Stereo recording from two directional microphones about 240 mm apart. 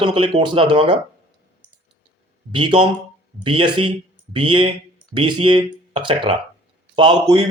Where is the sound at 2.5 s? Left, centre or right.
Right.